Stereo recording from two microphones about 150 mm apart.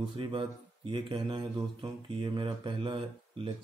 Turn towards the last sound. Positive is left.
turn(degrees=-35)  # may be behind; listen again after turning